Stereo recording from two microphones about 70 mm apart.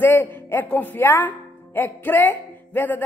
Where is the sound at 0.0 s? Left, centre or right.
Left.